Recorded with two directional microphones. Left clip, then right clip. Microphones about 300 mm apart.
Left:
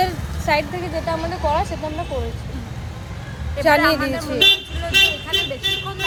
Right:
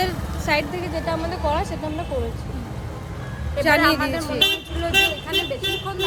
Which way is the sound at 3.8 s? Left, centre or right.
Centre.